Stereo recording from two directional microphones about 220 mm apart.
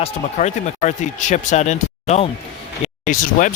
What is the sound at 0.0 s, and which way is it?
Speech, 30° left (ahead or behind).